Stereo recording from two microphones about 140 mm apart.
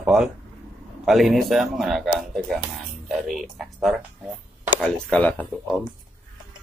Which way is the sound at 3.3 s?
Centre (ahead or behind).